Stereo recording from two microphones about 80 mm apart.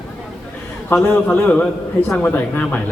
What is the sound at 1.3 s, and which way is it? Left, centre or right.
A man's voice, left.